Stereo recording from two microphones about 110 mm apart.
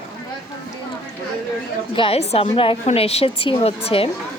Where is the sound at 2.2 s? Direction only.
70° left (ahead or behind).